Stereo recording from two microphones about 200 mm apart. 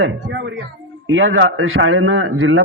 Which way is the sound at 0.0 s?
65° right (ahead or behind).